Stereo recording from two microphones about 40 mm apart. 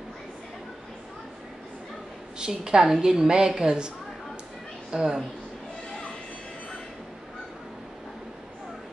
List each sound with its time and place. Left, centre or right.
2.3 s a woman's voice: centre
4.9 s a woman's voice: centre